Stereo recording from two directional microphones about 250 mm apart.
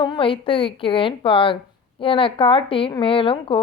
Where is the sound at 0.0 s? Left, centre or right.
Centre.